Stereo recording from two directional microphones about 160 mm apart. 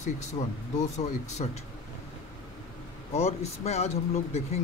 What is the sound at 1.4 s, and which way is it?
Speech, 45° left (ahead or behind).